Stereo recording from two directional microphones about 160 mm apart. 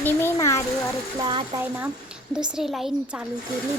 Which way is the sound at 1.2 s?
25° right (ahead or behind).